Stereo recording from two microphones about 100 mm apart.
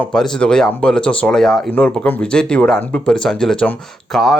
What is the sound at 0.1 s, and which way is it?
Speech, 5° left (ahead or behind).